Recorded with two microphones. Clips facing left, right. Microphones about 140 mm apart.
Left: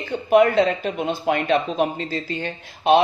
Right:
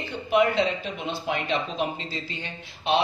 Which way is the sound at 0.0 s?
50° left (ahead or behind).